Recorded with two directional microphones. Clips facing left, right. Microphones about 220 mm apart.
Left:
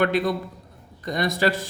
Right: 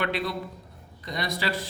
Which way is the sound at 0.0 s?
45° left (ahead or behind).